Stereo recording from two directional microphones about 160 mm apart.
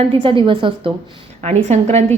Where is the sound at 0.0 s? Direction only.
35° right (ahead or behind).